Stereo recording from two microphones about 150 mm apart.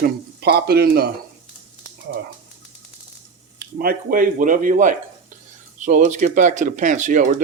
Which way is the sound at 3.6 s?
80° right.